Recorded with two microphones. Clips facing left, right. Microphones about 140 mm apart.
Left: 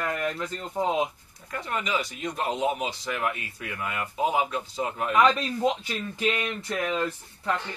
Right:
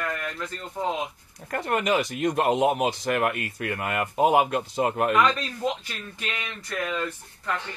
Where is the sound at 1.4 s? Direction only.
60° right (ahead or behind).